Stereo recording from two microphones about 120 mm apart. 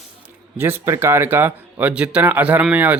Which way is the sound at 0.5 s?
20° right (ahead or behind).